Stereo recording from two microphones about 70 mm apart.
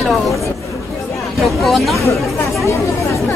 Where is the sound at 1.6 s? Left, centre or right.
Centre.